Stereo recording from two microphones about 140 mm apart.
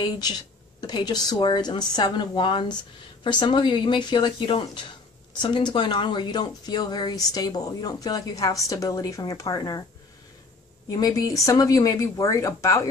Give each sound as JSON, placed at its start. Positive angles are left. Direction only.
{"t": 0.7, "sound": "a woman's voice", "side_deg": 30}
{"t": 10.9, "sound": "a woman's voice", "side_deg": 25}